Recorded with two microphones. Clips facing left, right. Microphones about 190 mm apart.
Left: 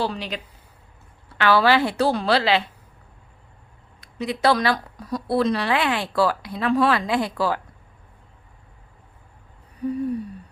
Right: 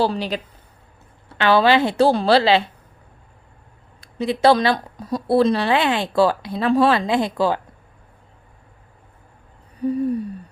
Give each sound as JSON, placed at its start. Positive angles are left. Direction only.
{"t": 0.0, "sound": "speech", "side_deg": -35}
{"t": 1.4, "sound": "a woman's voice", "side_deg": -25}
{"t": 4.0, "sound": "a woman's voice", "side_deg": -30}